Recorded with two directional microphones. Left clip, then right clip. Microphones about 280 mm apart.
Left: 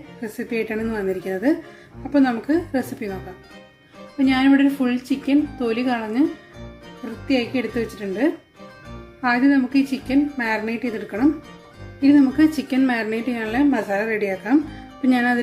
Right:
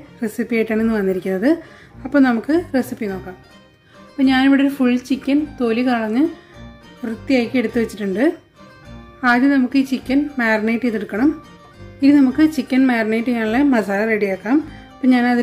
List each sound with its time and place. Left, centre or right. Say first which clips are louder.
0.2 s a woman's voice: right 5 dB; centre
4.2 s a woman's voice: right 2 dB; centre
7.2 s a woman's voice: right 4 dB; centre
9.2 s a woman's voice: right 3 dB; centre